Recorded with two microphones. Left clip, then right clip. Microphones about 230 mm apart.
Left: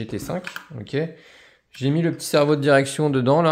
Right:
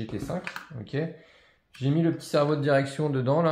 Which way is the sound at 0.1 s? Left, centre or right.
Left.